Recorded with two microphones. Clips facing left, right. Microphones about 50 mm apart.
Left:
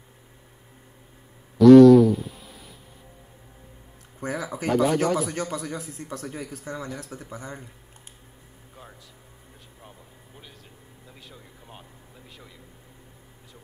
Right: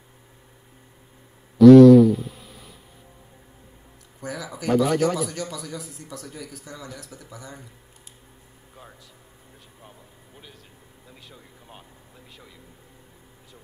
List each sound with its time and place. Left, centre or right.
1.6 s a sound: centre
4.2 s a man's voice: left
4.7 s a man's voice: left
11.1 s speech: centre